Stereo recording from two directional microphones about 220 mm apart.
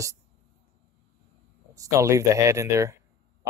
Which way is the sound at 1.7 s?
15° right (ahead or behind).